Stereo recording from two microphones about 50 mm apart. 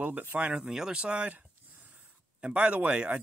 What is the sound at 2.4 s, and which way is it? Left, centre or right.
Speech, right.